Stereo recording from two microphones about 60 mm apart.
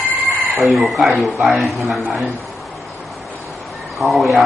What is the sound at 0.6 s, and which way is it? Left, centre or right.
A man's voice, centre.